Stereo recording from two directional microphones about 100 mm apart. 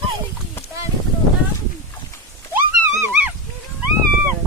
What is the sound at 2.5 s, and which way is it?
Horse, 20° right (ahead or behind).